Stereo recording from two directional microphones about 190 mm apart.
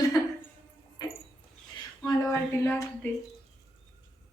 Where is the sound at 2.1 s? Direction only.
15° left (ahead or behind).